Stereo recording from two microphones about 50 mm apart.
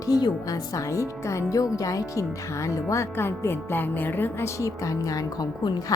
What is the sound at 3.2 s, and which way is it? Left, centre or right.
Speech, left.